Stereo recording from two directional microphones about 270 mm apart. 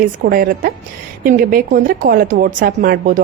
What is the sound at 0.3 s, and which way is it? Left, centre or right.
A woman's voice, right.